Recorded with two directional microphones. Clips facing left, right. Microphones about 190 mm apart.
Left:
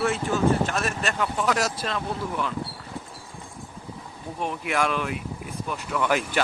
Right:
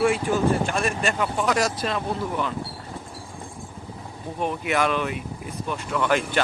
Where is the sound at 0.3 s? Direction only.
15° right (ahead or behind).